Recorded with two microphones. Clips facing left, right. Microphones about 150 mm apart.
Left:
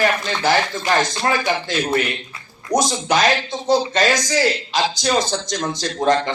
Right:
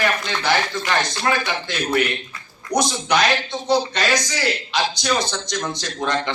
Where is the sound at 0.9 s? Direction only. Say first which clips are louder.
Left 3 dB; 40° left (ahead or behind).